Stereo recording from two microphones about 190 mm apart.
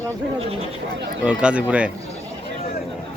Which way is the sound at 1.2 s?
5° right (ahead or behind).